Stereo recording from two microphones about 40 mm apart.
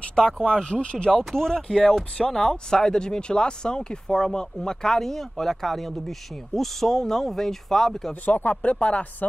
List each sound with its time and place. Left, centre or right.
0.2 s speech: centre
8.1 s speech: left